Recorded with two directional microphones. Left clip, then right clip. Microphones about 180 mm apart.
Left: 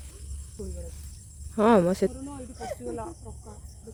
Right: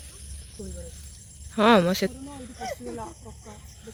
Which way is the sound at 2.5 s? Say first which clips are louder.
Right 1 dB; 40° right (ahead or behind).